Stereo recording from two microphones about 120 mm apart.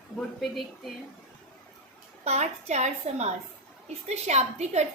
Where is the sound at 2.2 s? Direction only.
70° right (ahead or behind).